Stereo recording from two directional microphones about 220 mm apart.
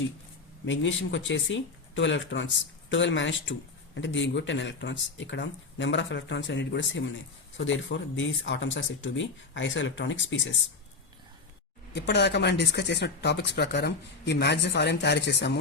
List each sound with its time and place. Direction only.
0.6 s speech: 55° left (ahead or behind)
11.9 s speech: 50° left (ahead or behind)